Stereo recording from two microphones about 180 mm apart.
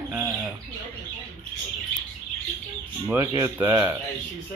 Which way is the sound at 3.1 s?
15° right (ahead or behind).